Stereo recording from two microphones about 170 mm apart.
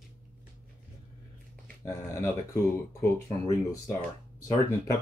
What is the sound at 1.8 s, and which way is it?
Speech, 20° left (ahead or behind).